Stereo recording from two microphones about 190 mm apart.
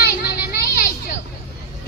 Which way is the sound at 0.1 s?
55° left (ahead or behind).